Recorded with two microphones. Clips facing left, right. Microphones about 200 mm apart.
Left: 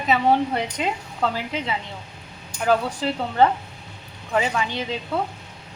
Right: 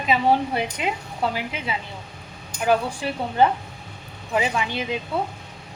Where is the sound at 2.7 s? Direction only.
15° right (ahead or behind).